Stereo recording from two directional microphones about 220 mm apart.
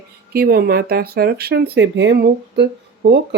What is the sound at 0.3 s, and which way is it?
Speech, 45° right (ahead or behind).